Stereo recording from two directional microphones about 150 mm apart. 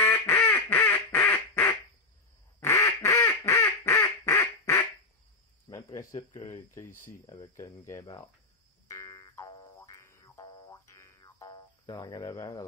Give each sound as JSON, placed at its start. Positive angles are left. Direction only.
{"t": 0.0, "sound": "quack", "side_deg": 15}
{"t": 5.7, "sound": "speech", "side_deg": 20}
{"t": 8.0, "sound": "speech", "side_deg": 30}
{"t": 8.8, "sound": "boing", "side_deg": 20}